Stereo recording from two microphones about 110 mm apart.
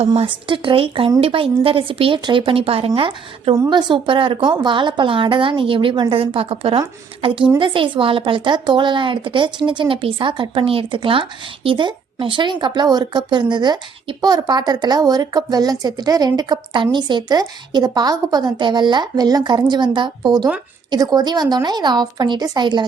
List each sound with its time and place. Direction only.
0.3 s a woman's voice: 50° right (ahead or behind)